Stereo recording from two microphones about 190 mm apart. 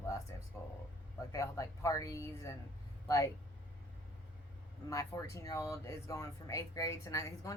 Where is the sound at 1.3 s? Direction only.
15° left (ahead or behind).